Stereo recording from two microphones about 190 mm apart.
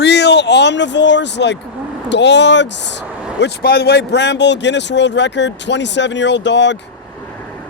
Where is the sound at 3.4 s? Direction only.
55° left (ahead or behind).